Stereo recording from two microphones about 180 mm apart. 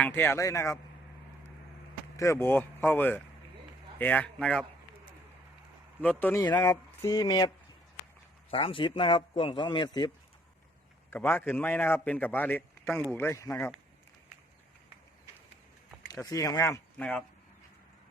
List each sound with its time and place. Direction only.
0.0 s a man's voice: 10° left (ahead or behind)
2.1 s a man's voice: 15° left (ahead or behind)
6.0 s a man's voice: 10° left (ahead or behind); by 10.1 s 25° left (ahead or behind)
11.1 s a man's voice: 10° left (ahead or behind)
16.2 s a man's voice: 20° left (ahead or behind)
17.0 s speech: 5° left (ahead or behind)